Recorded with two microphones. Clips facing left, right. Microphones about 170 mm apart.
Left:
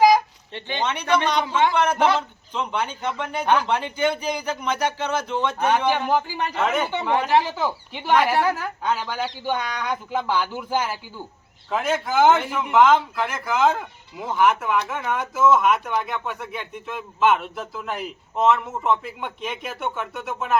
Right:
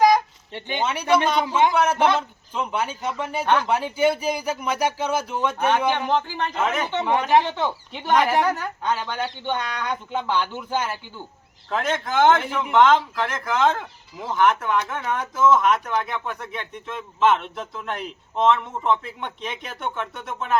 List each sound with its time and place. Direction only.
0.5 s speech: 10° right (ahead or behind)
5.6 s speech: 10° left (ahead or behind)